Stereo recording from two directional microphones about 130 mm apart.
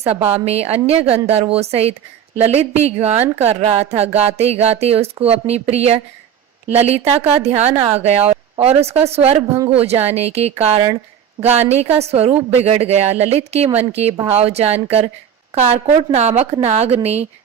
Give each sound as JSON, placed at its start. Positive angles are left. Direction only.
{"t": 0.0, "sound": "a woman's voice", "side_deg": -50}